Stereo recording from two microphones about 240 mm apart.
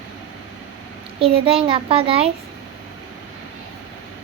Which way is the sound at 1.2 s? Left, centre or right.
Right.